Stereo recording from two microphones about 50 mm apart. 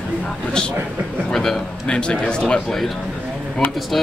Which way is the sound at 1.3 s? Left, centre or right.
Centre.